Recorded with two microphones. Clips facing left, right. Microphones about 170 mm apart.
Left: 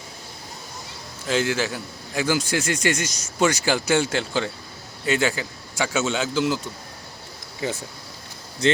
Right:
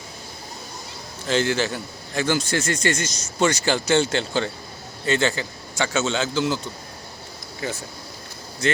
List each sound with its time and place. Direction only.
1.3 s a man's voice: 5° left (ahead or behind)
8.6 s speech: 30° left (ahead or behind)